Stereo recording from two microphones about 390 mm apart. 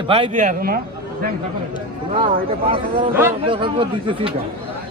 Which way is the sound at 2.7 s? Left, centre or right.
Centre.